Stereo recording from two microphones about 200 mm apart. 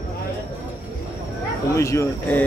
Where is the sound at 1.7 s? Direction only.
15° left (ahead or behind).